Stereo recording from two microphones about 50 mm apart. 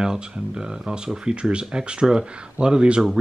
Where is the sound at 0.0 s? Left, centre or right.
Centre.